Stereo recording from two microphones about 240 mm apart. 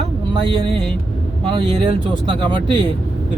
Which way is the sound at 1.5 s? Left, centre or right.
Right.